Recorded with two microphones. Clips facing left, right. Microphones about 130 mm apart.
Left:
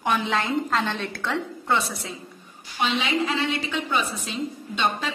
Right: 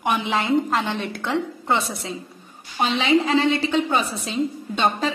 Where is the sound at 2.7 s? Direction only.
40° right (ahead or behind).